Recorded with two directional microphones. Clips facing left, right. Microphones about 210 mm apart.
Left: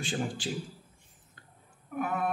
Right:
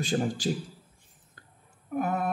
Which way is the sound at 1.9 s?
40° right (ahead or behind).